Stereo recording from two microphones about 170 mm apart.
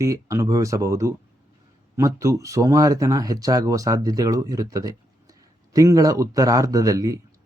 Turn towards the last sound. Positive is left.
turn(degrees=-20)  # may be behind; listen again after turning